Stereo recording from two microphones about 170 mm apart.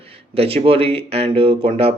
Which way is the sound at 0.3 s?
35° right (ahead or behind).